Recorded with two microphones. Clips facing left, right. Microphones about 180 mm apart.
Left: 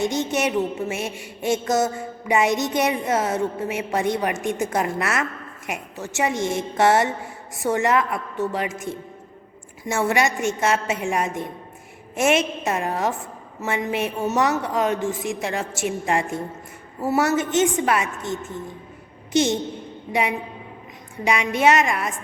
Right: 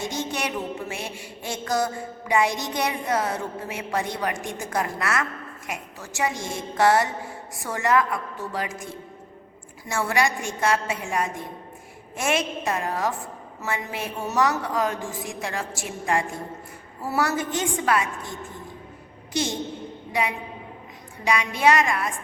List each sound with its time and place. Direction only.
0.0 s a woman's voice: 20° left (ahead or behind)
21.2 s a woman's voice: 20° left (ahead or behind)